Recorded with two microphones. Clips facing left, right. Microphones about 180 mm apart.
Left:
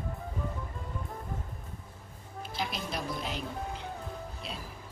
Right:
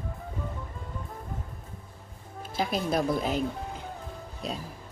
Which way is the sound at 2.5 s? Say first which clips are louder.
Right 9 dB; 50° right (ahead or behind).